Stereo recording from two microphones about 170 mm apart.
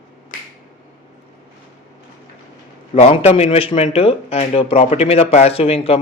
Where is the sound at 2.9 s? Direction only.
40° left (ahead or behind).